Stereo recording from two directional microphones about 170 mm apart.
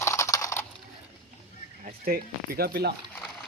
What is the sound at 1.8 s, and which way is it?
Speech, 60° right (ahead or behind).